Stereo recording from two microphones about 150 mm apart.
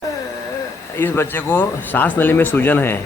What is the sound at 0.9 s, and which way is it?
Speech, 15° left (ahead or behind).